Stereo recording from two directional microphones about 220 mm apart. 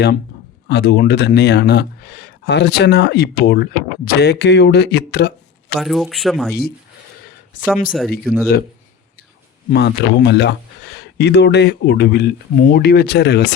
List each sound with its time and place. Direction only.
0.7 s speech: 50° left (ahead or behind)
5.8 s speech: centre (ahead or behind)
7.9 s speech: centre (ahead or behind)
9.7 s speech: 50° left (ahead or behind)